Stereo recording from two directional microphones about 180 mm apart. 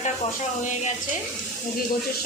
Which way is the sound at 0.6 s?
45° left (ahead or behind).